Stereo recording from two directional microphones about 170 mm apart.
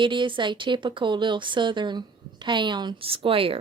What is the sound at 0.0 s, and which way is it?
Speech, 30° right (ahead or behind).